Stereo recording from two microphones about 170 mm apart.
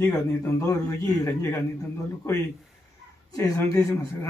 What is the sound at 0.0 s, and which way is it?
A man's voice, 15° left (ahead or behind).